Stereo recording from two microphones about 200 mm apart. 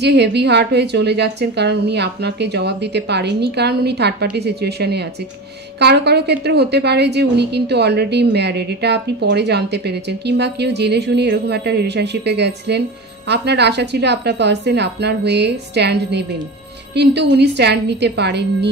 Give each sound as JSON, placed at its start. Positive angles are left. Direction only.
{"t": 0.0, "sound": "a woman's voice", "side_deg": -55}